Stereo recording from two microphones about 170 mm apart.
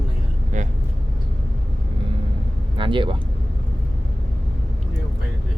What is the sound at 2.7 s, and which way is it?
Speech, 30° right (ahead or behind).